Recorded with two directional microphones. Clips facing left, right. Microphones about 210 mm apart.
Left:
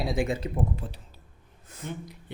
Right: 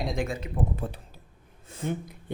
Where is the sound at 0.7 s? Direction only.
55° right (ahead or behind).